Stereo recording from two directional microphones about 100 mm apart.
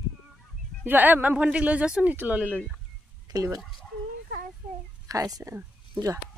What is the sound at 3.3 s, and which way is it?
Speech, 35° right (ahead or behind).